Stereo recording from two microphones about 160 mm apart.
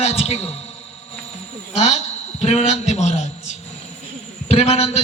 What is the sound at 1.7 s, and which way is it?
A man's voice, 45° left (ahead or behind).